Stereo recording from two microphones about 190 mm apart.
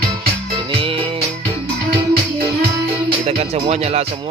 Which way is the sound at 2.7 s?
25° right (ahead or behind).